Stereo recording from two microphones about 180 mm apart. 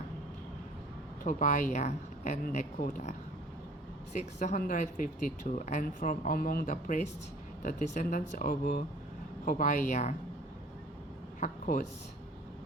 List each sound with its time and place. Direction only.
1.2 s speech: 45° left (ahead or behind)
11.3 s speech: 45° left (ahead or behind)